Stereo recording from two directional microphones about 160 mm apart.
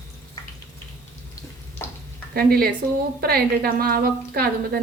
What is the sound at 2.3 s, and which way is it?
A woman's voice, 70° right (ahead or behind).